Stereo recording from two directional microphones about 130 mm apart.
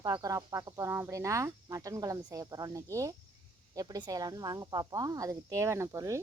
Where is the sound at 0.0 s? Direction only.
25° right (ahead or behind).